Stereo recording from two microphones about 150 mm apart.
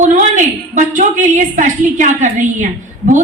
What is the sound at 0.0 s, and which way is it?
A woman's voice, 55° right (ahead or behind).